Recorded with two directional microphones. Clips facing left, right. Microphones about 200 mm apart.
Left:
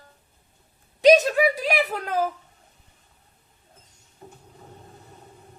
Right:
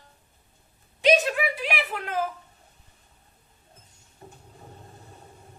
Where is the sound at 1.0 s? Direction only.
40° left (ahead or behind).